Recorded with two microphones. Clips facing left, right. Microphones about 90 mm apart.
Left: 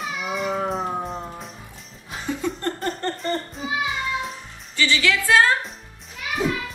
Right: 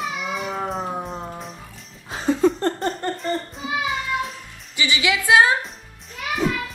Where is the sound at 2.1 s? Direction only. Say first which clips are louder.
Right 9 dB; 35° right (ahead or behind).